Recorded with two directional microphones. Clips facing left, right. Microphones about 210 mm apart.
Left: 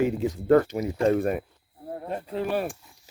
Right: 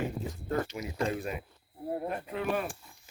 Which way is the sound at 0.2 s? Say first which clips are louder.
Left 13 dB; 80° left.